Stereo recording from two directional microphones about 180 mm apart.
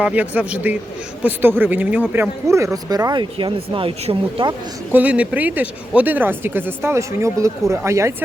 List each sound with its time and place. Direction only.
0.0 s speech: 10° right (ahead or behind); by 4.5 s 30° right (ahead or behind)
4.9 s speech: 10° right (ahead or behind)